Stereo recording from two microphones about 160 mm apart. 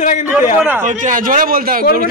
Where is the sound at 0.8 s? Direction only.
55° right (ahead or behind).